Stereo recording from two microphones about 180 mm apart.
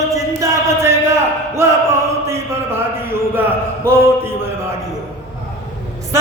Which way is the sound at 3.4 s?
15° right (ahead or behind).